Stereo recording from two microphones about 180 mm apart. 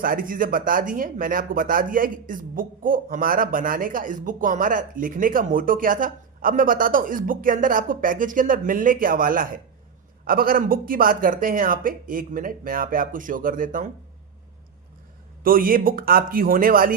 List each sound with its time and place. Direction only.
0.0 s speech: 50° right (ahead or behind)
15.4 s speech: 50° right (ahead or behind)